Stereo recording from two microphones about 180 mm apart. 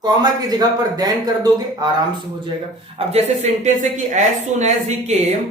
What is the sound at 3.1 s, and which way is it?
A woman's voice, 40° right (ahead or behind).